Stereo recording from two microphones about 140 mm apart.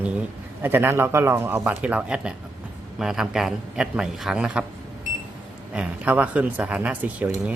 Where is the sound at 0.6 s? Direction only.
15° right (ahead or behind).